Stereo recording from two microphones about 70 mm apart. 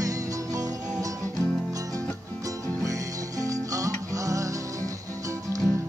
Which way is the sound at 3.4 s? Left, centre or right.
Right.